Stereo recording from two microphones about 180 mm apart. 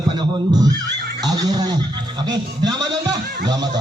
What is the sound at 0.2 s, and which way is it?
Speech, 20° right (ahead or behind).